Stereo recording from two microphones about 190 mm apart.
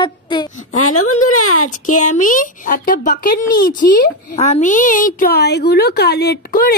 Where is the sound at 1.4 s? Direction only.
40° left (ahead or behind).